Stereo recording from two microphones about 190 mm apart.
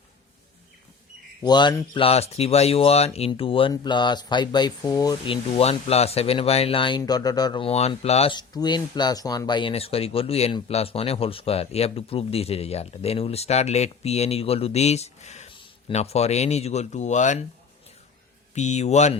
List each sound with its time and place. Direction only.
1.5 s speech: 20° left (ahead or behind); by 17.4 s 40° left (ahead or behind)
18.5 s speech: 35° left (ahead or behind)